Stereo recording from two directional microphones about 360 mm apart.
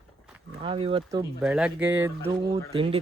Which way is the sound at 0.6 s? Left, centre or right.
Centre.